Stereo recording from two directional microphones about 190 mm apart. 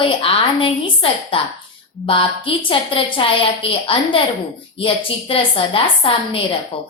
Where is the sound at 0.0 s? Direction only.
30° left (ahead or behind).